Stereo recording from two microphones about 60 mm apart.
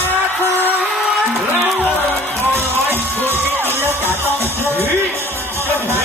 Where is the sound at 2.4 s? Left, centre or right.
Right.